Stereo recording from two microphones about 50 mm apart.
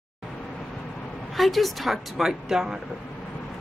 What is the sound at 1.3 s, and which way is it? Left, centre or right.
Speech, centre.